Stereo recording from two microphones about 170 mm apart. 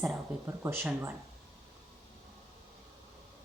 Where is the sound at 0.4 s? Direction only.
15° right (ahead or behind).